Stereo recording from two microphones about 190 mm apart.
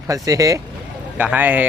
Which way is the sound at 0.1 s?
15° right (ahead or behind).